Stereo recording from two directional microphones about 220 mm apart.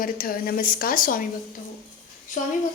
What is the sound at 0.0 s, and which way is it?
A woman's voice, 40° left (ahead or behind).